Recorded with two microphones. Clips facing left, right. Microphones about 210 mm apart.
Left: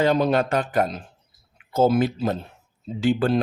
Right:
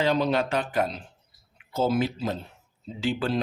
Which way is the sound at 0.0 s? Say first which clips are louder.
Left 4 dB; 50° left (ahead or behind).